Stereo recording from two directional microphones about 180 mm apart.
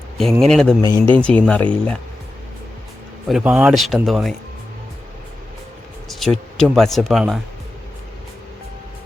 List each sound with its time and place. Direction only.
0.2 s speech: centre (ahead or behind)
0.9 s speech: 25° right (ahead or behind)
1.1 s speech: 5° left (ahead or behind)
3.2 s speech: 5° right (ahead or behind)
6.1 s speech: centre (ahead or behind)